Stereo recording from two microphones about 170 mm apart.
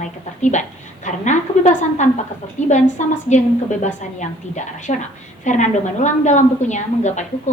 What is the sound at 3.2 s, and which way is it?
A woman's voice, 45° left (ahead or behind).